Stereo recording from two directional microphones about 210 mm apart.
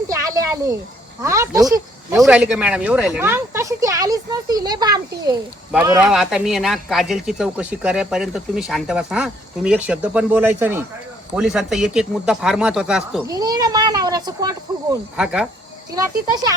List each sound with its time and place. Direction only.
0.1 s a sound: 15° right (ahead or behind)
1.2 s speech: 15° right (ahead or behind)
2.1 s speech: 5° right (ahead or behind)
13.2 s speech: 20° right (ahead or behind)
15.1 s speech: 5° right (ahead or behind)
15.9 s speech: 15° right (ahead or behind)